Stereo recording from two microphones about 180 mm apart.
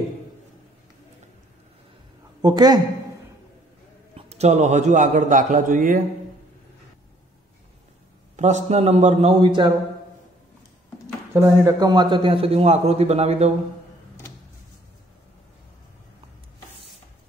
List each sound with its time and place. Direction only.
2.4 s a woman's voice: 20° right (ahead or behind)
4.1 s a man's voice: 35° right (ahead or behind)
8.4 s a man's voice: 40° right (ahead or behind)
11.3 s a man's voice: 15° right (ahead or behind); by 13.5 s 35° right (ahead or behind)